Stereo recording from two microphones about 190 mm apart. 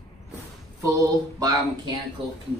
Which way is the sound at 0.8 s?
20° right (ahead or behind).